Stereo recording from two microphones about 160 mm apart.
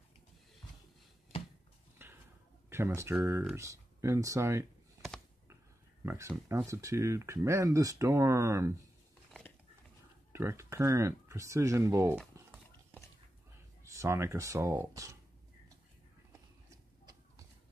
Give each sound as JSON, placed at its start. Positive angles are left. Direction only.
{"t": 2.0, "sound": "a sound", "side_deg": -15}
{"t": 2.7, "sound": "speech", "side_deg": -15}
{"t": 6.0, "sound": "speech", "side_deg": -15}
{"t": 10.3, "sound": "speech", "side_deg": -15}
{"t": 12.4, "sound": "a sound", "side_deg": -15}
{"t": 13.8, "sound": "speech", "side_deg": -20}